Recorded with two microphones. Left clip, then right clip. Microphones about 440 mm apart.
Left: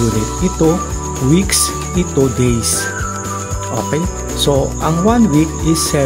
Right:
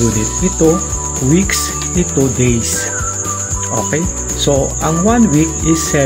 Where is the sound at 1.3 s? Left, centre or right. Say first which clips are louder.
Even; left.